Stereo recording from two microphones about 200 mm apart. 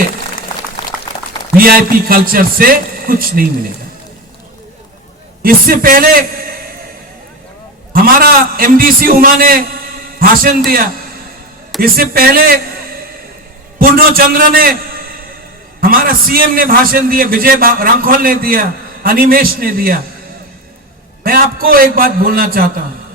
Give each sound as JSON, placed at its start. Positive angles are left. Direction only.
{"t": 1.1, "sound": "a sound", "side_deg": 20}
{"t": 1.5, "sound": "a man's voice", "side_deg": -45}
{"t": 5.4, "sound": "a man's voice", "side_deg": -45}
{"t": 7.9, "sound": "a man's voice", "side_deg": -45}
{"t": 11.8, "sound": "a man's voice", "side_deg": -45}
{"t": 21.2, "sound": "a man's voice", "side_deg": -45}